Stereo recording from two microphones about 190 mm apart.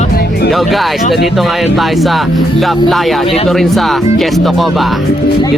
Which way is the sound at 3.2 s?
30° left (ahead or behind).